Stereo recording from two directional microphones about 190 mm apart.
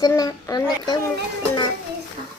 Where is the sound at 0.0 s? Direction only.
20° left (ahead or behind).